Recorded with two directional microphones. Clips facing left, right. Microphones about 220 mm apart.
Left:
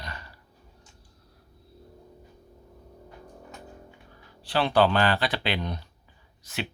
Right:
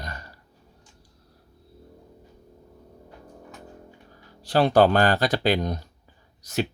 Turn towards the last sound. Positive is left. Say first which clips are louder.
# right 7 dB
turn(degrees=-40)  # may be behind; listen again after turning